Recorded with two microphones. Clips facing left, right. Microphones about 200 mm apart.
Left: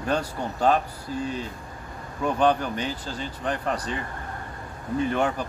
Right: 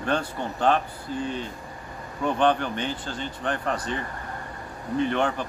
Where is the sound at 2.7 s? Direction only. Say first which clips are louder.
Even; 35° left (ahead or behind).